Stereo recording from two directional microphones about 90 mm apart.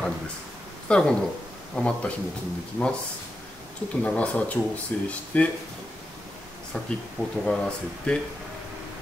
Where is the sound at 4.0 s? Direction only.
15° left (ahead or behind).